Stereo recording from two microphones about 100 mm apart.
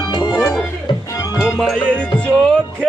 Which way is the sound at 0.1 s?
45° left (ahead or behind).